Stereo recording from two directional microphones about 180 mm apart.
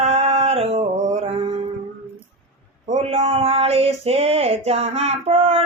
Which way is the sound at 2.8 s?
40° right (ahead or behind).